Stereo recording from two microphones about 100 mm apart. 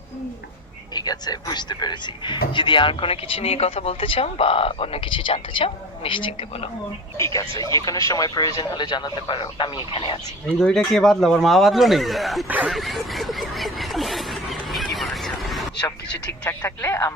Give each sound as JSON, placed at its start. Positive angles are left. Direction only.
{"t": 0.9, "sound": "speech", "side_deg": 45}
{"t": 7.2, "sound": "speech", "side_deg": 30}
{"t": 10.6, "sound": "speech", "side_deg": 5}
{"t": 12.6, "sound": "snicker", "side_deg": 0}
{"t": 16.5, "sound": "speech", "side_deg": 25}